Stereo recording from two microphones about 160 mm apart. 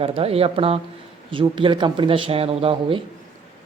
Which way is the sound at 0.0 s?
35° right (ahead or behind).